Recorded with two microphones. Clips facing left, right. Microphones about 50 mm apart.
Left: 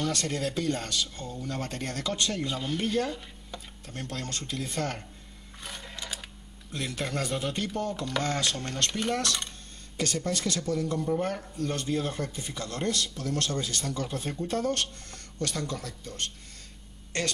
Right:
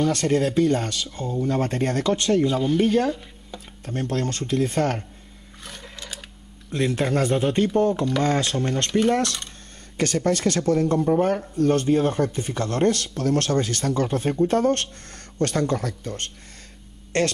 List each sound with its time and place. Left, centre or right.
0.1 s speech: right
1.6 s speech: right
2.4 s speech: centre
3.8 s speech: right
5.7 s a sound: centre
6.7 s speech: right
9.9 s speech: right